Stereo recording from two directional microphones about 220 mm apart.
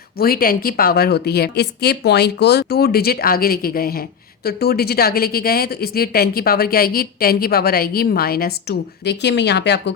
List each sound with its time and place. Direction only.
0.2 s speech: 40° left (ahead or behind)